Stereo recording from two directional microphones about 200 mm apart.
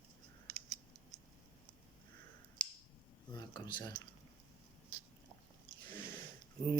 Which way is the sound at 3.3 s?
20° left (ahead or behind).